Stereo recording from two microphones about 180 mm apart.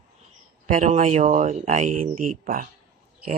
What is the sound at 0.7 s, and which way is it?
Speech, 45° right (ahead or behind).